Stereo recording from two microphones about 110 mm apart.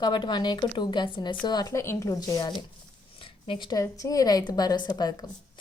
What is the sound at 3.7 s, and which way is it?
Speech, 30° left (ahead or behind).